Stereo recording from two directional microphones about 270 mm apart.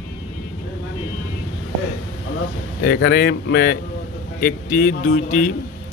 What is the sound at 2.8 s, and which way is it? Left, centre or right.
A man's voice, left.